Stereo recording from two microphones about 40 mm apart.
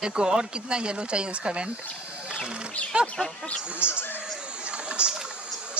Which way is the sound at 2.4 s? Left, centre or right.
Right.